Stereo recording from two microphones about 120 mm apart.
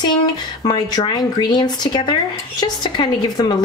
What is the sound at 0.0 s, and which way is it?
Speech, 35° left (ahead or behind).